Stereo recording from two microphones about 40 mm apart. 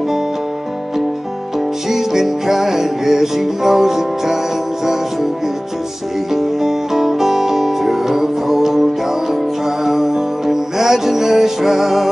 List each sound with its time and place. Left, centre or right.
1.9 s music: centre
6.3 s music: centre
9.8 s music: centre